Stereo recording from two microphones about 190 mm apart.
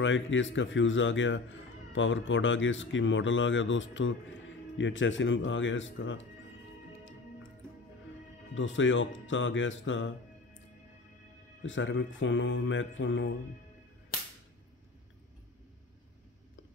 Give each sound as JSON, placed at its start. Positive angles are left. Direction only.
{"t": 0.0, "sound": "speech", "side_deg": 80}
{"t": 8.5, "sound": "speech", "side_deg": 80}
{"t": 11.6, "sound": "speech", "side_deg": 80}